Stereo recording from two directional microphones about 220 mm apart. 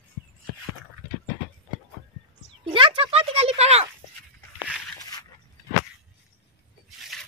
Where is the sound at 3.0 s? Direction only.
25° right (ahead or behind).